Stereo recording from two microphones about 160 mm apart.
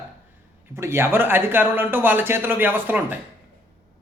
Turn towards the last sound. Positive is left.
turn(degrees=-10)  # may be behind; listen again after turning